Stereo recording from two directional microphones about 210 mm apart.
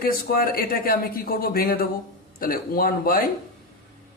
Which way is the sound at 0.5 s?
45° left (ahead or behind).